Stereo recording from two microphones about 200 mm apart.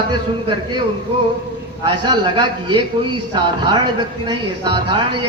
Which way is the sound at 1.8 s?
25° right (ahead or behind).